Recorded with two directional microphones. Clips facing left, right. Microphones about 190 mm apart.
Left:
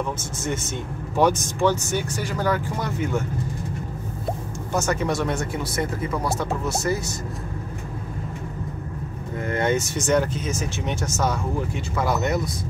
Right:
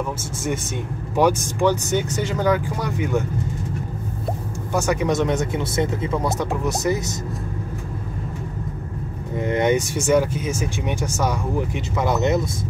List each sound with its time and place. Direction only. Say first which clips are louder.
1.1 s speech: right 2 dB; 10° right (ahead or behind)
4.7 s speech: right 3 dB; 15° right (ahead or behind)
9.4 s speech: right 4 dB; 20° right (ahead or behind)